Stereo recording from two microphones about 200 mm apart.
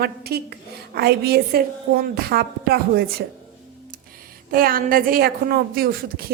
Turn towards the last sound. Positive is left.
turn(degrees=-50)  # may be behind; listen again after turning